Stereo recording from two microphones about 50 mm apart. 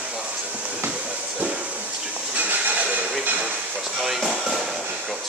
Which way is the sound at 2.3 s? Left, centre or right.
Right.